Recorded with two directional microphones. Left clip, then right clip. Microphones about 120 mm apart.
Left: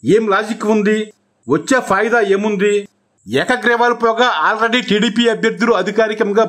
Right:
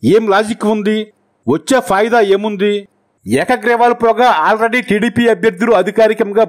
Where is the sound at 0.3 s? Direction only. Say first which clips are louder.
Right 2 dB; 65° right (ahead or behind).